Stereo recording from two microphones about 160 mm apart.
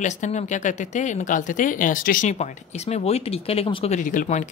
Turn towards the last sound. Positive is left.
turn(degrees=55)  # may be behind; listen again after turning